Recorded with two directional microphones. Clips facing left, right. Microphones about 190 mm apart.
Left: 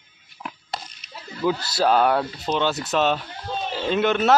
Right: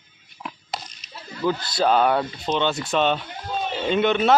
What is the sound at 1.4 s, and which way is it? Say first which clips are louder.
A man's voice: even; 5° left (ahead or behind).